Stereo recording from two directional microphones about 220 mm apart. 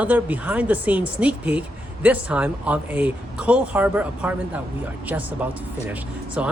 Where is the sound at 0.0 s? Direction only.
5° right (ahead or behind).